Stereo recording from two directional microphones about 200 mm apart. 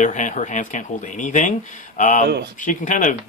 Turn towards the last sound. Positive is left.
turn(degrees=40)  # may be behind; listen again after turning